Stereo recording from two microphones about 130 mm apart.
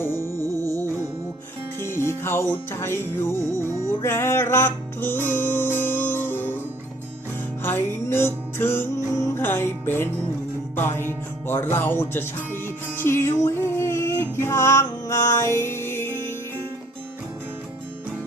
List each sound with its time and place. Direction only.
0.0 s music: 20° left (ahead or behind)
1.8 s music: 20° left (ahead or behind)
7.6 s music: 15° left (ahead or behind)